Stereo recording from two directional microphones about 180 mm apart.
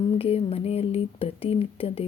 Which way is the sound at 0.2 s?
30° left (ahead or behind).